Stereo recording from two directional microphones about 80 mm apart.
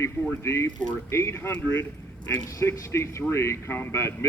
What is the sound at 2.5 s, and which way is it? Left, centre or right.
A man's voice, left.